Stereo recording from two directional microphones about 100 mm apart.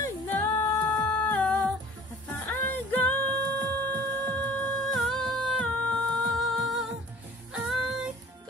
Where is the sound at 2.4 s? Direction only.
15° left (ahead or behind).